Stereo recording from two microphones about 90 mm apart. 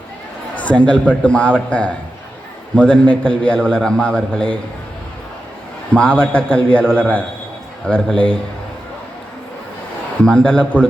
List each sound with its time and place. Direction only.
0.5 s a man's voice: 15° left (ahead or behind)
5.9 s a man's voice: 15° left (ahead or behind)
10.2 s a man's voice: 15° left (ahead or behind)